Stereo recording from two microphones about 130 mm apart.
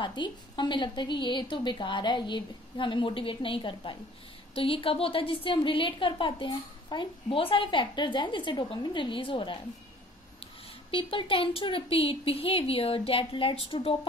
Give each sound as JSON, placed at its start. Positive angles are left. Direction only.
{"t": 0.0, "sound": "a woman's voice", "side_deg": 35}